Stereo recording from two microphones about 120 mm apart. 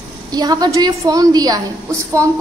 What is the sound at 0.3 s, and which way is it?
A woman's voice, 35° right (ahead or behind).